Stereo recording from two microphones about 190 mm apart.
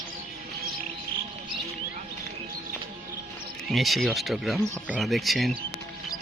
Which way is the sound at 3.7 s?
Centre (ahead or behind).